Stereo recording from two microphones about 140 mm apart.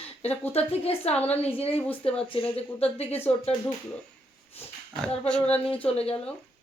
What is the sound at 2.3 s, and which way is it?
Speech, 40° left (ahead or behind).